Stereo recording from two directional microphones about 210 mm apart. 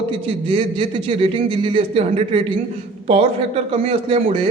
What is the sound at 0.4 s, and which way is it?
A man's voice, 25° right (ahead or behind).